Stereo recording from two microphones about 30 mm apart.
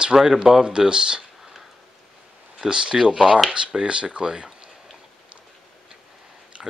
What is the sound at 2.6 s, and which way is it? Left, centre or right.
Speech, right.